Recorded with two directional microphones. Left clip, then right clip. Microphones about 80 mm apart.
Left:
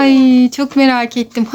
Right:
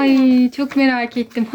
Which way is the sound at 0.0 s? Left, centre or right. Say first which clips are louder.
Left 4 dB; left.